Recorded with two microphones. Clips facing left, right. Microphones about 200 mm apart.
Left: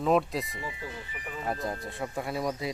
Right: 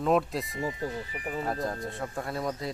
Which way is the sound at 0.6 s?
40° right (ahead or behind).